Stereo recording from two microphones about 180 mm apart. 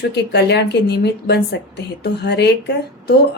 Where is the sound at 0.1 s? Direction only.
70° left (ahead or behind).